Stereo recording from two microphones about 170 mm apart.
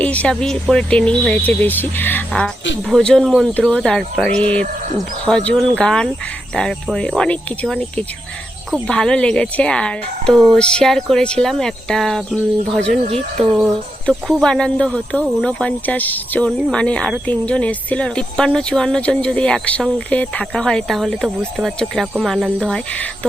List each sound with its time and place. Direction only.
0.0 s speech: 10° left (ahead or behind)
13.0 s speech: 35° right (ahead or behind)
14.1 s speech: centre (ahead or behind)